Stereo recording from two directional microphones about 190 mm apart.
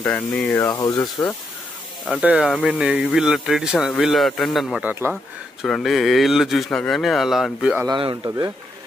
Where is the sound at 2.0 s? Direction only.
5° right (ahead or behind).